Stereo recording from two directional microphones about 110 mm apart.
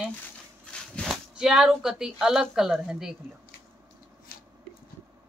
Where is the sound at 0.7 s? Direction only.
5° left (ahead or behind).